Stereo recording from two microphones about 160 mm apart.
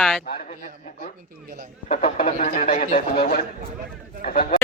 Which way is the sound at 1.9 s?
55° left (ahead or behind).